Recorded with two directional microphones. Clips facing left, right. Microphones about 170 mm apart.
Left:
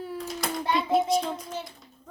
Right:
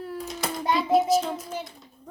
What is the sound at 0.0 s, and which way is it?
Child singing, centre (ahead or behind).